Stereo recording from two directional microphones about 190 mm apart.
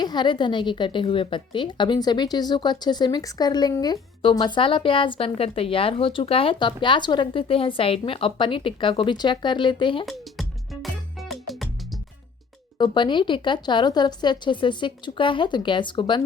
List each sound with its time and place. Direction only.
0.0 s a woman's voice: 20° left (ahead or behind)
11.2 s music: centre (ahead or behind)
12.8 s a woman's voice: 25° left (ahead or behind)